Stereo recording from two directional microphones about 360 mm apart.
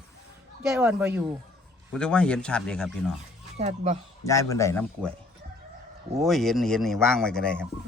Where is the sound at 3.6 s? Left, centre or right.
Centre.